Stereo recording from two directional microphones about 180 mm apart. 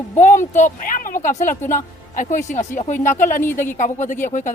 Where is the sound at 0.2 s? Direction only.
45° left (ahead or behind).